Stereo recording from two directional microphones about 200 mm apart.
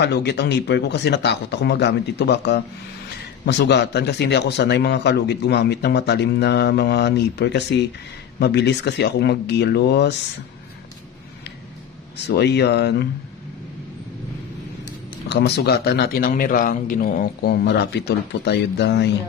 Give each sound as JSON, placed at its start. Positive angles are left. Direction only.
{"t": 0.0, "sound": "speech", "side_deg": 55}
{"t": 12.2, "sound": "speech", "side_deg": 55}
{"t": 15.2, "sound": "speech", "side_deg": 55}